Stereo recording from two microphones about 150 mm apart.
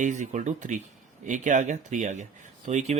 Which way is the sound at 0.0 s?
55° right (ahead or behind).